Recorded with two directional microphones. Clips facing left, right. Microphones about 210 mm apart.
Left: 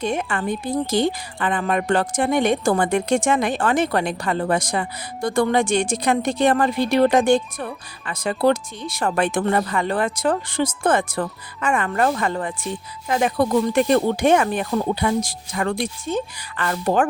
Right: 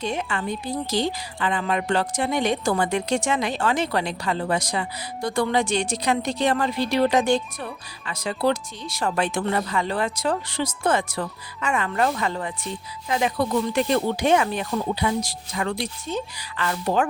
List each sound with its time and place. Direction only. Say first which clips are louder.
0.0 s a woman's voice: left 4 dB; 50° left (ahead or behind)